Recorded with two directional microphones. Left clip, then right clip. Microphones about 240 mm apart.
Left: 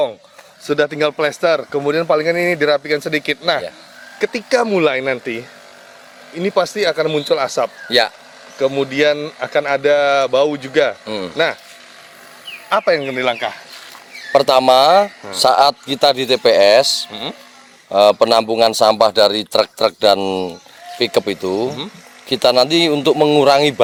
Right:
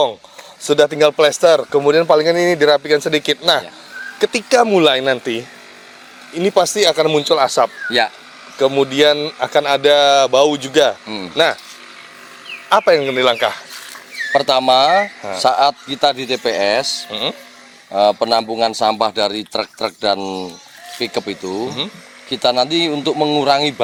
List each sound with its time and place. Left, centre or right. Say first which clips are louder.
0.6 s speech: right 4 dB; centre
6.4 s speech: right 3 dB; centre
7.9 s speech: left 1 dB; left
8.5 s speech: right 2 dB; centre
12.6 s speech: right 3 dB; centre
14.3 s speech: left 2 dB; left
17.1 s speech: right 5 dB; centre
17.9 s speech: left 3 dB; left